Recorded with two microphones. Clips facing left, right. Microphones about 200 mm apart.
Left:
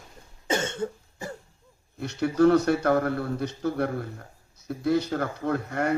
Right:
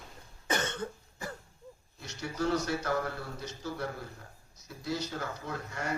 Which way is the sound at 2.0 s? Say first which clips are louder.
Left 13 dB; 60° left (ahead or behind).